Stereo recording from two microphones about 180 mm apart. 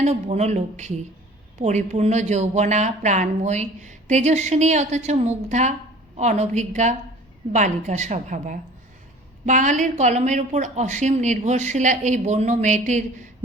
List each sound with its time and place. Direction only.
0.0 s speech: 40° right (ahead or behind)